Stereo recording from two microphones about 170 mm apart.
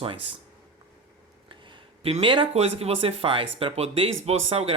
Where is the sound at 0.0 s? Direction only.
30° right (ahead or behind).